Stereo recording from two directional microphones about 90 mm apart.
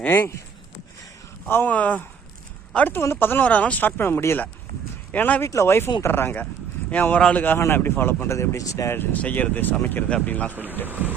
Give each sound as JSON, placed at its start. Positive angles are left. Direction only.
{"t": 0.0, "sound": "speech", "side_deg": 25}
{"t": 1.5, "sound": "speech", "side_deg": 20}
{"t": 5.4, "sound": "speech", "side_deg": 30}
{"t": 9.0, "sound": "speech", "side_deg": 20}
{"t": 10.5, "sound": "a sound", "side_deg": -20}